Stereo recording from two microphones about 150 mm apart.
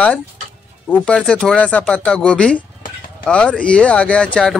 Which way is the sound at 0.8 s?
5° left (ahead or behind).